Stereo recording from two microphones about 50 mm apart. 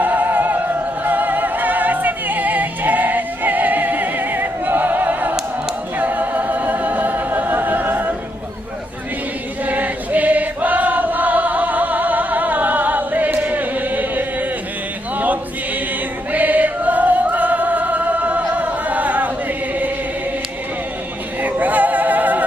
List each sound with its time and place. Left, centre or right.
0.0 s music: right
6.0 s a capella: right
9.6 s choir: right
16.3 s music: right
21.4 s music: right